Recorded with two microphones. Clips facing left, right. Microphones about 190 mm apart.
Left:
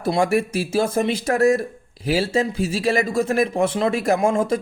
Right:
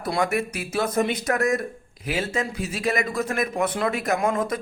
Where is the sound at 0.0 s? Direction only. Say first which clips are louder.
Left 5 dB; 30° left (ahead or behind).